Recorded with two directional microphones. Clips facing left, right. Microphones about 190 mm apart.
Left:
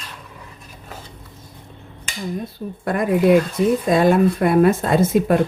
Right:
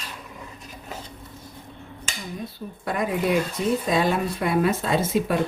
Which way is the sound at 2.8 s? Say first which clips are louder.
Left 8 dB; 50° left (ahead or behind).